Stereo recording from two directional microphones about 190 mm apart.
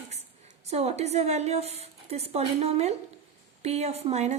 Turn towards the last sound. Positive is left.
turn(degrees=-35)  # may be behind; listen again after turning